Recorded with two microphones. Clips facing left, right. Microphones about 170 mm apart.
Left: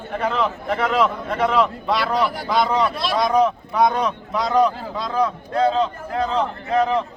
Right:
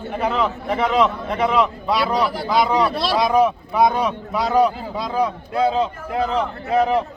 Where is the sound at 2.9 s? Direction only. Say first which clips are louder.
Right 3 dB; 35° right (ahead or behind).